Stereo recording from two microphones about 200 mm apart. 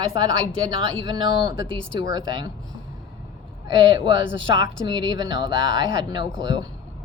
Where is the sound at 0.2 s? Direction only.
20° right (ahead or behind).